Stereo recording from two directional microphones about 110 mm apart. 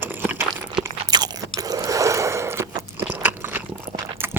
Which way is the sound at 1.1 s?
40° right (ahead or behind).